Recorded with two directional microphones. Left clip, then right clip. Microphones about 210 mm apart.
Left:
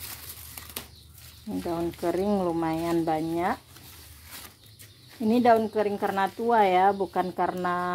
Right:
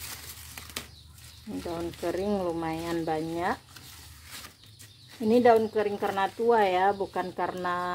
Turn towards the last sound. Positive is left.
turn(degrees=25)  # may be behind; listen again after turning